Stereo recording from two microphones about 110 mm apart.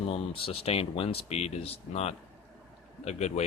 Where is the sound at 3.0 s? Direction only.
90° left.